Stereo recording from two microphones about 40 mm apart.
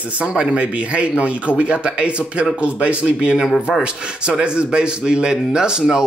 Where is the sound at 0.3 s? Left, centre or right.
Right.